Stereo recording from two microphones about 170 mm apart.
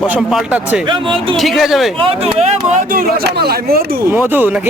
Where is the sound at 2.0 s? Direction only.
35° right (ahead or behind).